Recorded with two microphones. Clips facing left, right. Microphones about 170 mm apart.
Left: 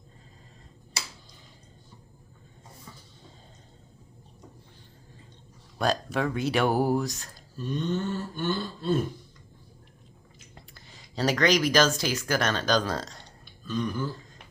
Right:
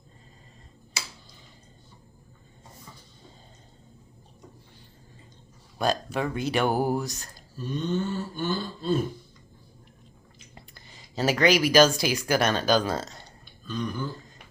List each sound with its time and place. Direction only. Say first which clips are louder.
5.7 s speech: even; centre (ahead or behind)
10.3 s speech: right 1 dB; centre (ahead or behind)